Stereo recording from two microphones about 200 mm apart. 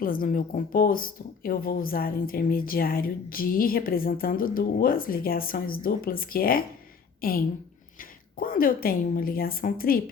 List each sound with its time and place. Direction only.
0.0 s a woman's voice: 45° left (ahead or behind)